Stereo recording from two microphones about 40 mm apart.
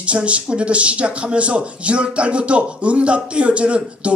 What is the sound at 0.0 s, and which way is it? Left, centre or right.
Speech, right.